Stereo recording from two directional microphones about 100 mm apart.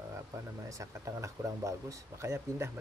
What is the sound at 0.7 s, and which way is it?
Speech, 30° right (ahead or behind).